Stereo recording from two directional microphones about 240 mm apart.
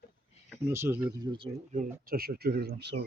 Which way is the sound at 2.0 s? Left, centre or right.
Right.